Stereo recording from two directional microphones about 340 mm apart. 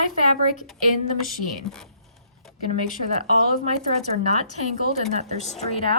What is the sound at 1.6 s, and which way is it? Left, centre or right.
Speech, centre.